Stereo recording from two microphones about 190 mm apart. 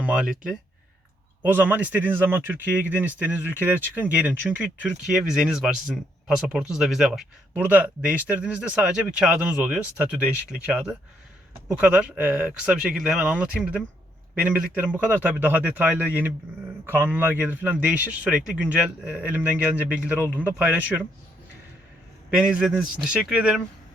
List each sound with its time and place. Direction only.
0.0 s speech: 5° right (ahead or behind)
22.4 s speech: 5° right (ahead or behind)